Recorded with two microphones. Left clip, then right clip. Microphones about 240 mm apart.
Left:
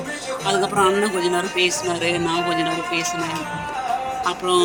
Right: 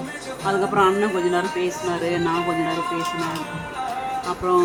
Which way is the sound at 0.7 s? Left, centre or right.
Centre.